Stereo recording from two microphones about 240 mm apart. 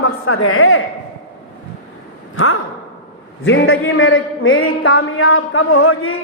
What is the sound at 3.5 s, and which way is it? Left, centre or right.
A man's voice, left.